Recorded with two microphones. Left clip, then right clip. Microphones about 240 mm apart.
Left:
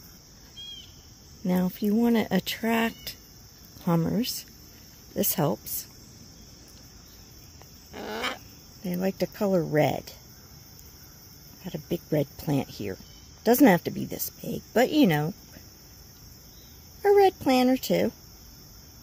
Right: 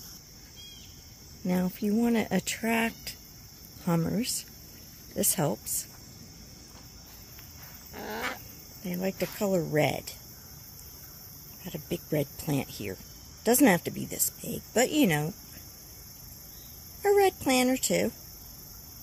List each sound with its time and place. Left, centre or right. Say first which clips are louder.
1.4 s speech: left 3 dB; left
7.9 s dog: left 3 dB; left
8.8 s speech: left 3 dB; left
11.6 s speech: left 3 dB; left
17.0 s speech: left 4 dB; left